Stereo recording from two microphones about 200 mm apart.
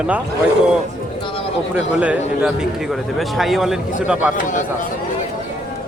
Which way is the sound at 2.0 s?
5° right (ahead or behind).